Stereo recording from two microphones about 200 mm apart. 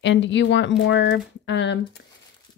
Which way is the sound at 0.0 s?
65° left (ahead or behind).